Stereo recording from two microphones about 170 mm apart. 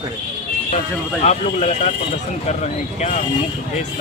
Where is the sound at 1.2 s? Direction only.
45° left (ahead or behind).